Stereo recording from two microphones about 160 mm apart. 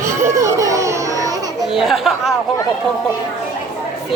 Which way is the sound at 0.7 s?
20° right (ahead or behind).